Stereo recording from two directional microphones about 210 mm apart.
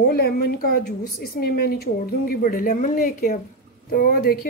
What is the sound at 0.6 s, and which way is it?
A woman's voice, 45° left (ahead or behind).